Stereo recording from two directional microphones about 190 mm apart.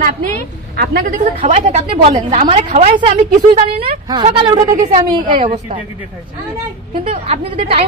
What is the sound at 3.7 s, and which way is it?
Speech, 50° right (ahead or behind).